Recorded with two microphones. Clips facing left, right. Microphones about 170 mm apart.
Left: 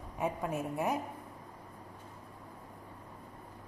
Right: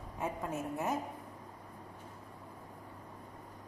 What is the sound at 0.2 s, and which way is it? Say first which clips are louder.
Speech: left 3 dB; 15° left (ahead or behind).